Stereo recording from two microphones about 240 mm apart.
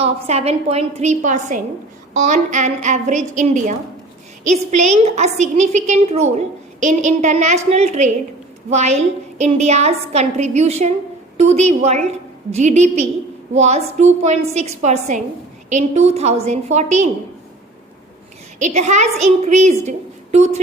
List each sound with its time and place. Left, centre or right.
0.0 s a woman's voice: right
18.6 s a woman's voice: right